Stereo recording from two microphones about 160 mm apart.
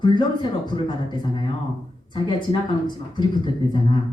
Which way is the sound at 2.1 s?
30° left (ahead or behind).